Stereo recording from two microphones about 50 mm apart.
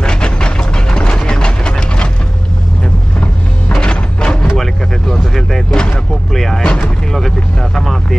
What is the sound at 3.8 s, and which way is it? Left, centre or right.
Music, centre.